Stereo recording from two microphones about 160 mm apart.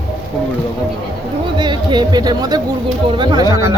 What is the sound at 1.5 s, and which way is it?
Speech, 30° right (ahead or behind).